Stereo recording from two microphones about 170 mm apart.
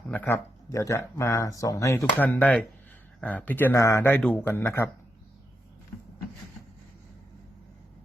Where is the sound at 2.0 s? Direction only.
10° left (ahead or behind).